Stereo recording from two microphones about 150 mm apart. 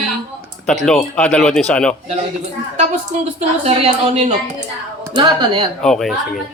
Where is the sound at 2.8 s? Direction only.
45° right (ahead or behind).